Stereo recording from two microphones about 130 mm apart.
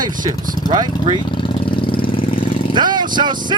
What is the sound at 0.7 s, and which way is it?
Speech, 35° right (ahead or behind).